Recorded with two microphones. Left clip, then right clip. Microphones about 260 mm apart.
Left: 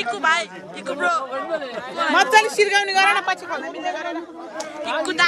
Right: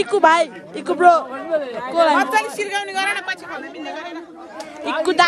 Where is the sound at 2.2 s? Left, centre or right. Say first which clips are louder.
Left 3 dB; left.